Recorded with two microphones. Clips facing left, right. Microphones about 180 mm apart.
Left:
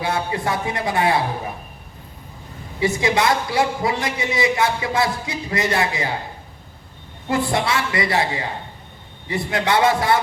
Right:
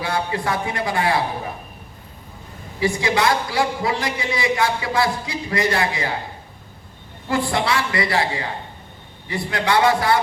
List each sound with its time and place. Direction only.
0.0 s a woman's voice: 20° left (ahead or behind)
2.8 s a woman's voice: 20° left (ahead or behind)
7.3 s a woman's voice: 25° left (ahead or behind)